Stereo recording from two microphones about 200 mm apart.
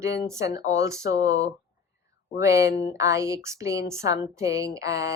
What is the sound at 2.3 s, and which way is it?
A woman's voice, 15° right (ahead or behind).